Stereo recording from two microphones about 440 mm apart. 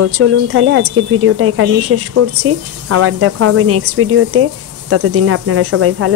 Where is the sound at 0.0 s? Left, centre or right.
Right.